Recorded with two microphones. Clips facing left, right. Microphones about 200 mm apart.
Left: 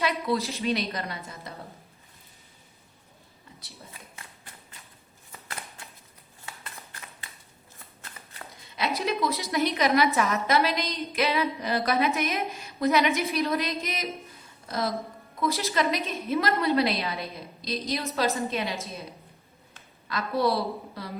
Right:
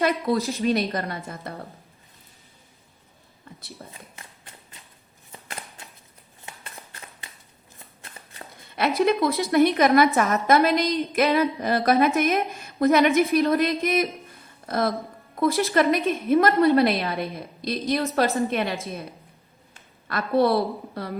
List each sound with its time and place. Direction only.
0.0 s a woman's voice: 50° right (ahead or behind)
3.8 s a woman's voice: 55° right (ahead or behind)
6.4 s shuffling cards: 20° right (ahead or behind)
9.0 s a woman's voice: 55° right (ahead or behind)
20.1 s a woman's voice: 55° right (ahead or behind)